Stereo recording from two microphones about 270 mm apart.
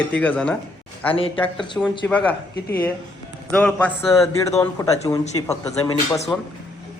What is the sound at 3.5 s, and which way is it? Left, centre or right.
Speech, centre.